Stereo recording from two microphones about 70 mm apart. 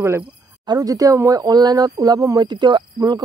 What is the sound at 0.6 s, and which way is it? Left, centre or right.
Speech, right.